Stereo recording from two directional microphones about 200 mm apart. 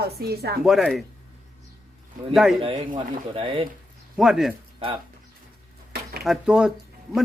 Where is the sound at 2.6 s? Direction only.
25° right (ahead or behind).